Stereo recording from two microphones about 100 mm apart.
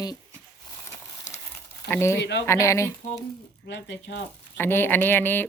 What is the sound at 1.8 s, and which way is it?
Speech, 25° left (ahead or behind).